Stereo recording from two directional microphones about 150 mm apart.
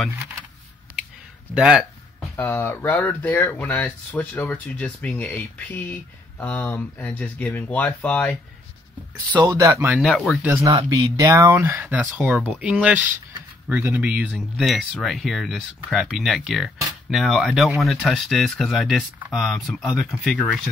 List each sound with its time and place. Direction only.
1.5 s a sound: 5° right (ahead or behind)
2.3 s speech: 15° left (ahead or behind)
9.3 s speech: 25° right (ahead or behind)
9.9 s speech: centre (ahead or behind)
10.4 s speech: 20° right (ahead or behind)
12.0 s speech: 5° right (ahead or behind)